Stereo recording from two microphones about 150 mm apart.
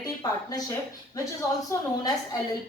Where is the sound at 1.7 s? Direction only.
25° left (ahead or behind).